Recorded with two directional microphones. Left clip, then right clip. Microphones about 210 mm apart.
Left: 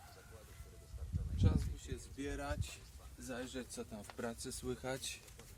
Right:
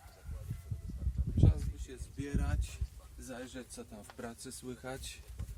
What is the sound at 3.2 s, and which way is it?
Speech, 20° left (ahead or behind).